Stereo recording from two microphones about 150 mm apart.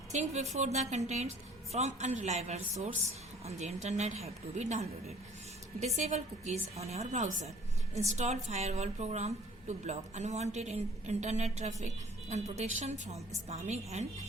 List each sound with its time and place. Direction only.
0.1 s a woman's voice: 50° right (ahead or behind)